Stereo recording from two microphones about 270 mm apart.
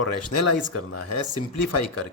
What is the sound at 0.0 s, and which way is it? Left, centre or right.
Speech, left.